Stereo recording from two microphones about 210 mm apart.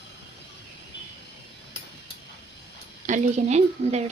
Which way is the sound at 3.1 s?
35° right (ahead or behind).